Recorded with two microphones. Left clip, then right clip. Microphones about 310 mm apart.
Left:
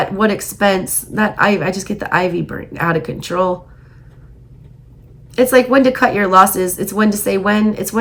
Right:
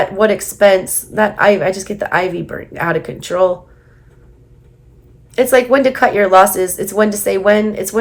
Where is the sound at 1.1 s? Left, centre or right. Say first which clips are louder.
Right 2 dB; left.